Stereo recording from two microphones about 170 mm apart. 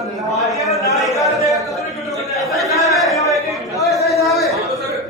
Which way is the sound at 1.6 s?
Centre (ahead or behind).